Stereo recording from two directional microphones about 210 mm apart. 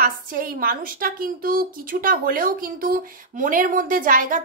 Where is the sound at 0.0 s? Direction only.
40° right (ahead or behind).